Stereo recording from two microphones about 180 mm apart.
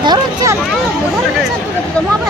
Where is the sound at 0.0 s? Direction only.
25° right (ahead or behind).